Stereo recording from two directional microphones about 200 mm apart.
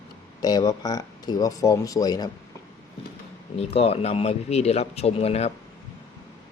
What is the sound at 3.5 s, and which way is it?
A man's voice, 30° left (ahead or behind).